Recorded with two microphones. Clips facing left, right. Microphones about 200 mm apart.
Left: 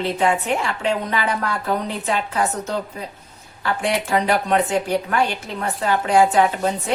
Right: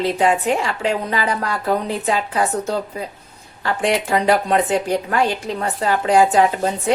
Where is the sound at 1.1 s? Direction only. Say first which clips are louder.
Right 1 dB; 35° right (ahead or behind).